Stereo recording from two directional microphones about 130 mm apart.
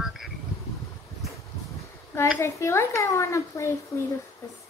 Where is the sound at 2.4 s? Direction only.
20° left (ahead or behind).